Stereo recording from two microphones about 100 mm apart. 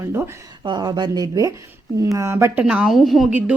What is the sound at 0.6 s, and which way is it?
Speech, 45° right (ahead or behind).